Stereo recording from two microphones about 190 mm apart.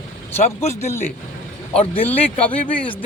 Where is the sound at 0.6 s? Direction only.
35° left (ahead or behind).